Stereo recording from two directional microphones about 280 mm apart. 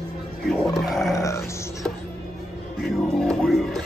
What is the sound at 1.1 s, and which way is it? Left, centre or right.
Music, centre.